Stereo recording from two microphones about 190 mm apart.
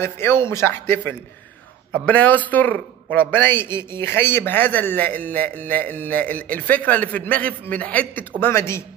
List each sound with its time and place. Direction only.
0.0 s a man's voice: 15° left (ahead or behind)